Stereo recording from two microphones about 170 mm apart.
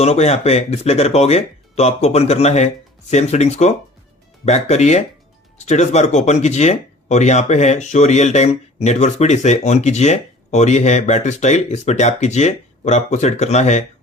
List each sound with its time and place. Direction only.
0.0 s speech: 40° left (ahead or behind)